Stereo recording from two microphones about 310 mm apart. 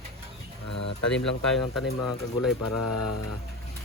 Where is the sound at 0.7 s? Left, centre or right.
Left.